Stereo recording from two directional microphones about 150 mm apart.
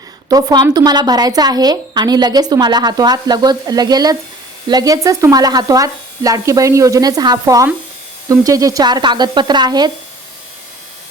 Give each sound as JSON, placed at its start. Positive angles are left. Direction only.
{"t": 0.3, "sound": "a woman's voice", "side_deg": -25}